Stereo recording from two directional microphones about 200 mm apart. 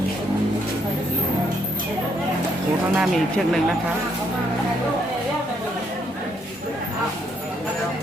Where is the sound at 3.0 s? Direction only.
Centre (ahead or behind).